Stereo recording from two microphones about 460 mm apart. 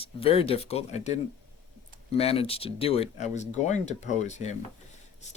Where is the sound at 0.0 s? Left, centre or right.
Centre.